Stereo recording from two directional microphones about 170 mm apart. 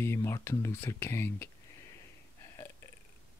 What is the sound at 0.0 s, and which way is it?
Speech, 15° left (ahead or behind).